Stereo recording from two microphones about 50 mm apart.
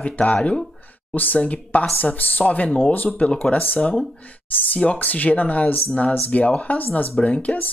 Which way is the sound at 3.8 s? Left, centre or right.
Centre.